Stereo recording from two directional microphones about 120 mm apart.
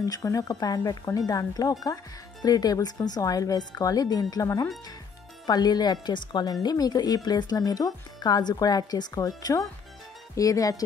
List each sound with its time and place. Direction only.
0.0 s speech: 30° left (ahead or behind)